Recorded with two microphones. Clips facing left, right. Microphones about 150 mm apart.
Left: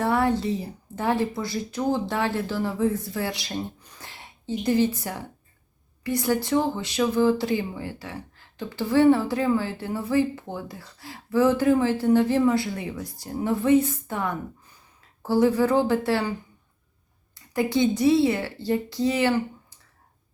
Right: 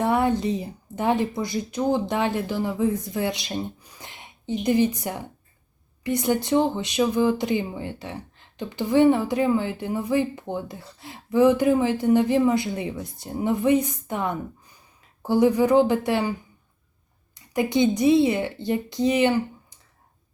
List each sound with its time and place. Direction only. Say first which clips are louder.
0.0 s speech: right 1 dB; 20° right (ahead or behind)
17.5 s a woman's voice: right 1 dB; 20° right (ahead or behind)